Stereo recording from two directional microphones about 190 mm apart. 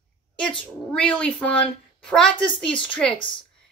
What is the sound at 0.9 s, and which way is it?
A woman's voice, 5° left (ahead or behind).